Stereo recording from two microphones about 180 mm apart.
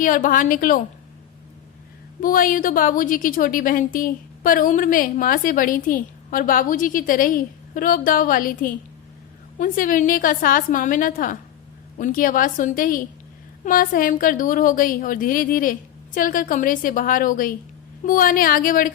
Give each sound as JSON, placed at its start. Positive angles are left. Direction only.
{"t": 0.0, "sound": "a woman's voice", "side_deg": 50}
{"t": 2.2, "sound": "a woman's voice", "side_deg": 50}